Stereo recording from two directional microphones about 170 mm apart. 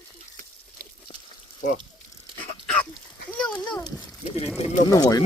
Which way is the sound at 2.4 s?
5° left (ahead or behind).